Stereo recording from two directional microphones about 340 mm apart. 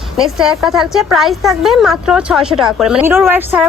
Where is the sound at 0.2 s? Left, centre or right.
Centre.